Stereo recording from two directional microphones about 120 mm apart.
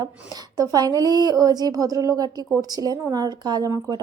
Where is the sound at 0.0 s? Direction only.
35° right (ahead or behind).